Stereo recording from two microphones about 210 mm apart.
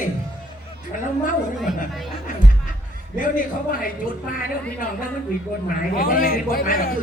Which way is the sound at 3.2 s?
40° left (ahead or behind).